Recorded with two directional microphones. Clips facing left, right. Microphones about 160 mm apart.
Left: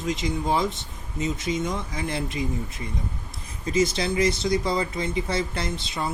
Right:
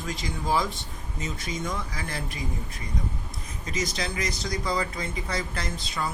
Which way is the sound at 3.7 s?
30° left (ahead or behind).